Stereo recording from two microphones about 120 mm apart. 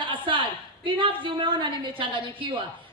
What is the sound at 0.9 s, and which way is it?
A man's voice, 45° right (ahead or behind).